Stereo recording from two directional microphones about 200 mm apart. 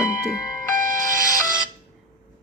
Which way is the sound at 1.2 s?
20° left (ahead or behind).